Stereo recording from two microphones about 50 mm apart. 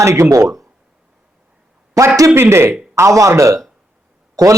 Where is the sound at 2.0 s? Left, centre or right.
Right.